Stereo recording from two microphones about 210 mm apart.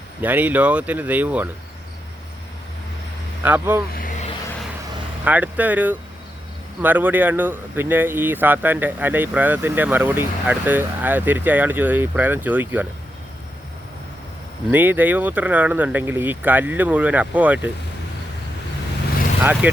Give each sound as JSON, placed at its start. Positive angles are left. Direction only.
{"t": 0.2, "sound": "speech", "side_deg": -10}
{"t": 3.4, "sound": "speech", "side_deg": -10}
{"t": 3.9, "sound": "vehicle", "side_deg": 40}
{"t": 5.2, "sound": "speech", "side_deg": -5}
{"t": 14.7, "sound": "speech", "side_deg": -10}
{"t": 19.6, "sound": "speech", "side_deg": -10}